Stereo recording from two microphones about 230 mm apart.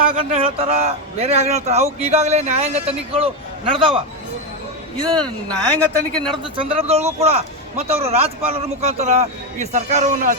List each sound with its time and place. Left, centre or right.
0.0 s a man's voice: right
5.6 s a man's voice: centre
6.4 s a man's voice: right